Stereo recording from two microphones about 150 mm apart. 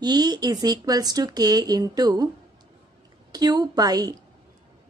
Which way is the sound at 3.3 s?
25° right (ahead or behind).